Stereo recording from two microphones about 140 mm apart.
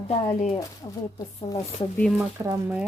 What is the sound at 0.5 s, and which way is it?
Speech, 25° left (ahead or behind).